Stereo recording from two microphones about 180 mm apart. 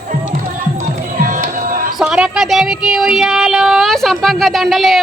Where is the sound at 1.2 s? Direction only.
50° right (ahead or behind).